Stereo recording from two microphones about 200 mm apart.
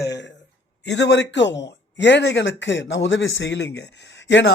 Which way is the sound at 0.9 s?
60° left (ahead or behind).